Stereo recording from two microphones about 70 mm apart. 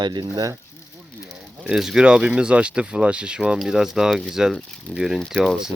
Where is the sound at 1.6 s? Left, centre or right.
Centre.